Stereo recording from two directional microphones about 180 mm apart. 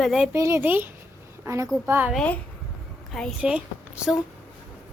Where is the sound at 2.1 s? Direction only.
5° left (ahead or behind).